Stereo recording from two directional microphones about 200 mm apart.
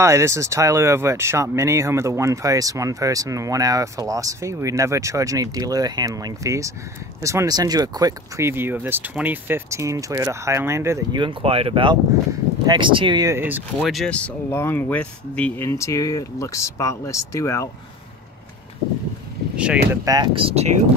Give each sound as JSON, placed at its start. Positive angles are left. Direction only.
{"t": 0.0, "sound": "speech", "side_deg": -15}
{"t": 13.7, "sound": "speech", "side_deg": 0}
{"t": 19.5, "sound": "speech", "side_deg": -5}
{"t": 20.1, "sound": "speech", "side_deg": -25}